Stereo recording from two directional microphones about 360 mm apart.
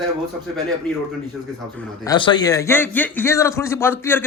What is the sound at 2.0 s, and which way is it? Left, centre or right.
A man's voice, centre.